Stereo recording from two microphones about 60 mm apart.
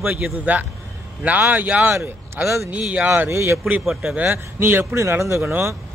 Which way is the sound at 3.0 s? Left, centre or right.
Right.